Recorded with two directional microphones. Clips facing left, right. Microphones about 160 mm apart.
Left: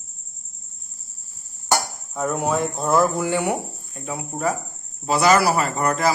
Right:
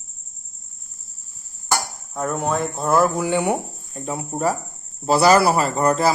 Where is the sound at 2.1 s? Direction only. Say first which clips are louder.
Even; 5° left (ahead or behind).